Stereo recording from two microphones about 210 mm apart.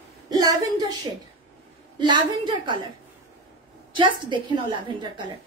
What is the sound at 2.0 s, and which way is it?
Speech, 20° right (ahead or behind).